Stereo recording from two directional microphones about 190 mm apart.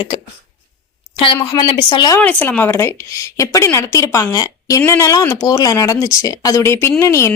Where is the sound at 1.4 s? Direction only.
20° left (ahead or behind).